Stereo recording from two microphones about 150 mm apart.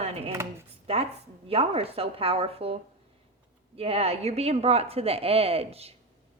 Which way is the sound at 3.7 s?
40° right (ahead or behind).